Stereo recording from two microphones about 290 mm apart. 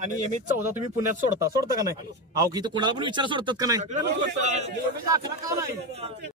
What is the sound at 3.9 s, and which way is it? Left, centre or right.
Speech, right.